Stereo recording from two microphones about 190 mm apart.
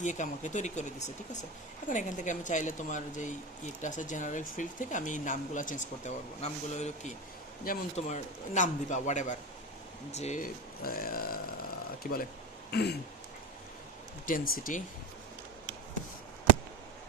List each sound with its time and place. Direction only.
0.0 s speech: 40° left (ahead or behind)
12.7 s speech: 60° left (ahead or behind)
14.3 s speech: 50° left (ahead or behind)